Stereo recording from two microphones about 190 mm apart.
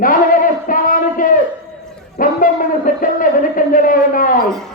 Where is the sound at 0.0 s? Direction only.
45° left (ahead or behind).